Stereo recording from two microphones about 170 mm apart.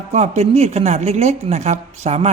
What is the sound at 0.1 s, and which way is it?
Speech, 40° right (ahead or behind).